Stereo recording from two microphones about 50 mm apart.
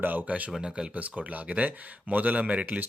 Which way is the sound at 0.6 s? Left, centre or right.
Centre.